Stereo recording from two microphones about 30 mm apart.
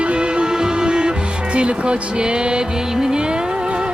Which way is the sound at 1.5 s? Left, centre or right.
Right.